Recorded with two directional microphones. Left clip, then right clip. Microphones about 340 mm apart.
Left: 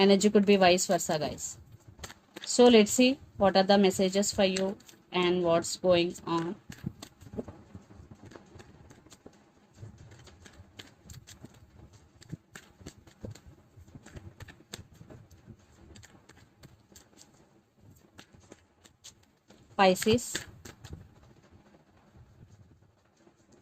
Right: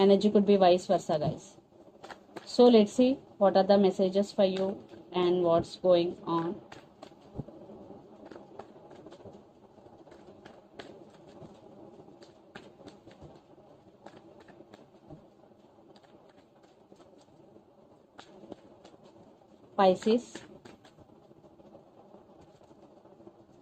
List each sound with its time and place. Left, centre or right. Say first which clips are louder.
0.0 s a woman's voice: even; left
19.7 s speech: even; left